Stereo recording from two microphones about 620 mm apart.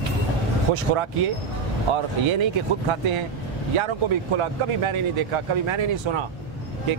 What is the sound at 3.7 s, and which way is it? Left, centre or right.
Speech, right.